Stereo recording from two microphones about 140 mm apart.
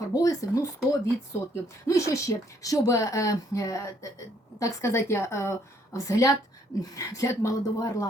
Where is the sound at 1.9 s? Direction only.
20° left (ahead or behind).